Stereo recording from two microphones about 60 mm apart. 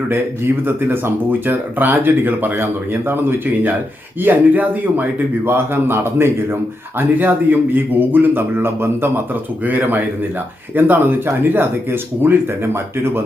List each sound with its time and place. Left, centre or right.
0.1 s speech: right
5.5 s speech: right
7.2 s speech: right